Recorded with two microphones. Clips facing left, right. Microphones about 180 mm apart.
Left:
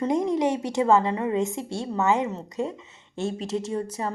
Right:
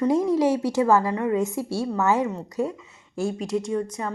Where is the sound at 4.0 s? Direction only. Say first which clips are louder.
Even; 30° left (ahead or behind).